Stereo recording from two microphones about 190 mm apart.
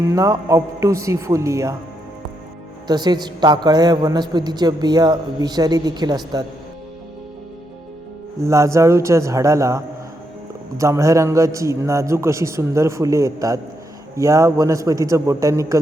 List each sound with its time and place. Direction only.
0.1 s a man's voice: 15° right (ahead or behind)
2.8 s a woman's voice: 20° right (ahead or behind)
8.4 s a man's voice: 15° right (ahead or behind)